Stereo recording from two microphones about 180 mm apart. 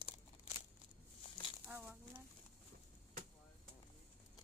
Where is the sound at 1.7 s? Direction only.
10° right (ahead or behind).